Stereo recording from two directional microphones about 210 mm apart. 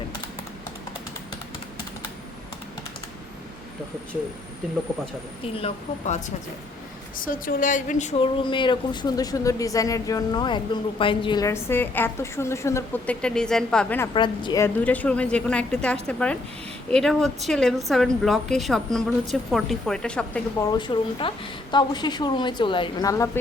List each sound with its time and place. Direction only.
5.5 s speech: 30° left (ahead or behind); by 14.1 s 5° left (ahead or behind)
14.1 s a woman's voice: 20° left (ahead or behind); by 20.7 s 5° left (ahead or behind)
20.7 s a woman's voice: 20° left (ahead or behind)